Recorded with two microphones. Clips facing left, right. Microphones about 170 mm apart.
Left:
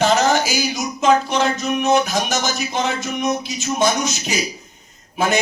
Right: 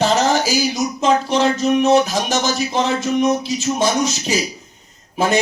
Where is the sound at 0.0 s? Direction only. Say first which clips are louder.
Even; 35° right (ahead or behind).